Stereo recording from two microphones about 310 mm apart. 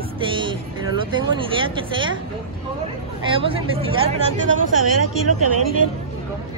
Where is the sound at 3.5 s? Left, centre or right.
Centre.